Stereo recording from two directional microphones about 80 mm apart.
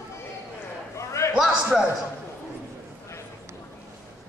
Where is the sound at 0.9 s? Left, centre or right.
Left.